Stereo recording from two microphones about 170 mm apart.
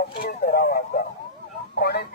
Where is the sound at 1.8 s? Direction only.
75° left (ahead or behind).